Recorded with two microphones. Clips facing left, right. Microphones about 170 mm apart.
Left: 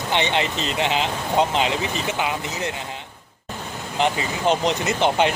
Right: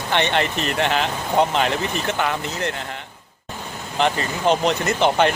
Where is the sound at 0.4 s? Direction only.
65° right (ahead or behind).